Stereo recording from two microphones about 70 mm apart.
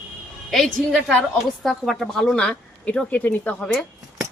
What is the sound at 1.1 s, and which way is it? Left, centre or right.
A woman's voice, centre.